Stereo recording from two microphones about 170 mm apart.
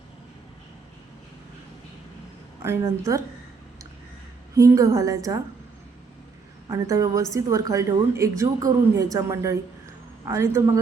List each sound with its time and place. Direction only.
2.6 s a woman's voice: 15° right (ahead or behind)
4.5 s a woman's voice: 20° right (ahead or behind)
6.7 s a woman's voice: 20° right (ahead or behind)